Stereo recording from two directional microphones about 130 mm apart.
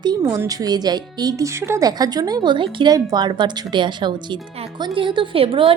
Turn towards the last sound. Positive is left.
turn(degrees=-45)  # may be behind; listen again after turning